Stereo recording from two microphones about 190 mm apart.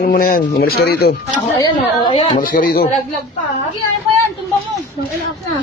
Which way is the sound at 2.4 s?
50° left (ahead or behind).